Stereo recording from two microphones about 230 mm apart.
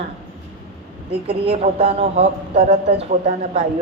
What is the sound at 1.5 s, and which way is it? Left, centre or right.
A woman's voice, right.